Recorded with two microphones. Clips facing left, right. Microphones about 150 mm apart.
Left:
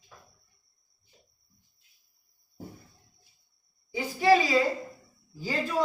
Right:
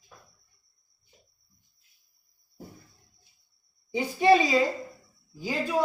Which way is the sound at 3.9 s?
20° right (ahead or behind).